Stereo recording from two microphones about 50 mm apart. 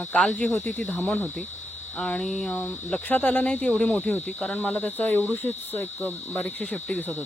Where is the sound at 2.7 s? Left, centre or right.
Left.